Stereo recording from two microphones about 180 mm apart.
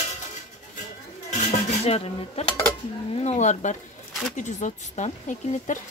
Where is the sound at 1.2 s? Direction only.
40° left (ahead or behind).